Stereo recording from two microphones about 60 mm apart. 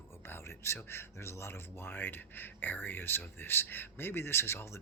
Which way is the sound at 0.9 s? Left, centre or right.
Left.